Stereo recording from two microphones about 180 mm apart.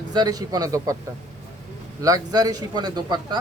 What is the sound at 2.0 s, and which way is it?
Speech, 20° right (ahead or behind).